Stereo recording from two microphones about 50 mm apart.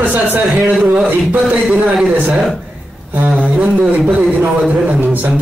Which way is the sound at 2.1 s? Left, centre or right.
Right.